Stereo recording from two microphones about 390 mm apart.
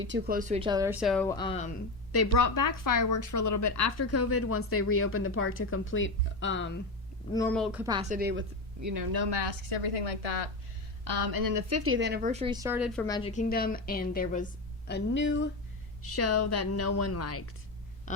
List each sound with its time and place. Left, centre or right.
0.0 s a woman's voice: right; by 1.7 s centre
2.1 s a woman's voice: left
7.3 s speech: centre; by 8.4 s right
8.8 s speech: right
9.1 s a woman's voice: right
11.0 s a woman's voice: right; by 17.5 s left